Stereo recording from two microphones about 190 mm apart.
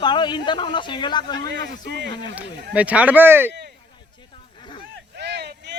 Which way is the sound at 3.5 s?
60° right (ahead or behind).